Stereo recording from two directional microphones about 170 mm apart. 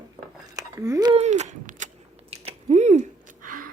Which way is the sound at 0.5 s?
20° right (ahead or behind).